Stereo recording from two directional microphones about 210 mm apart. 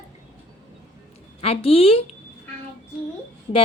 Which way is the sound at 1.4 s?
25° left (ahead or behind).